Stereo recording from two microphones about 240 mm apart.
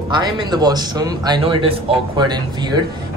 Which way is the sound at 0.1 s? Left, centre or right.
Centre.